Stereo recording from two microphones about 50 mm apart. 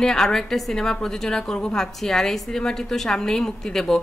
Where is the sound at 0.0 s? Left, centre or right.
Centre.